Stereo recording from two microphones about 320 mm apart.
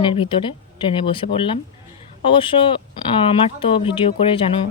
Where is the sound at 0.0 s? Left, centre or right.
Centre.